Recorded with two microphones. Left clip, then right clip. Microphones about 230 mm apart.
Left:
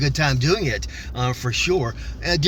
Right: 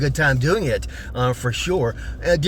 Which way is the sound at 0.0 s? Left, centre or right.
Centre.